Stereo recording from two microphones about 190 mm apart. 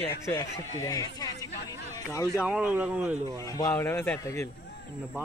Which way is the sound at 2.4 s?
5° right (ahead or behind).